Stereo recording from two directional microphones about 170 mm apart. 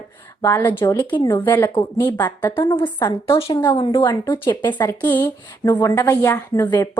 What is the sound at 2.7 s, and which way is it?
A woman's voice, 30° left (ahead or behind).